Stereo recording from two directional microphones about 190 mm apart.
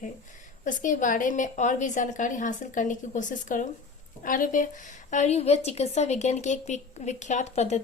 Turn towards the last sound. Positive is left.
turn(degrees=35)  # may be behind; listen again after turning